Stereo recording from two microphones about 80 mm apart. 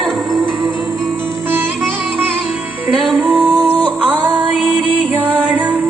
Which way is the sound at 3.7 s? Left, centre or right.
Centre.